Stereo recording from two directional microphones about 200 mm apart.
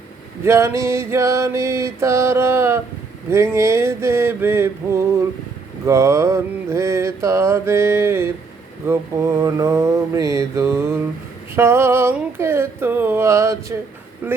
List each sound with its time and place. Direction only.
0.4 s mantra: 15° right (ahead or behind)